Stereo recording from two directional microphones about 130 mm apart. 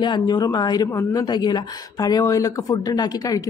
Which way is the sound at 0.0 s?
35° left (ahead or behind).